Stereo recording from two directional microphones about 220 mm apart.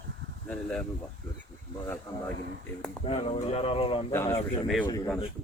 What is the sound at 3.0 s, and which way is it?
Speech, 25° left (ahead or behind).